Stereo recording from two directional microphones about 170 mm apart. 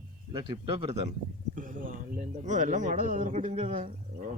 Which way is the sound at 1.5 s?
50° right (ahead or behind).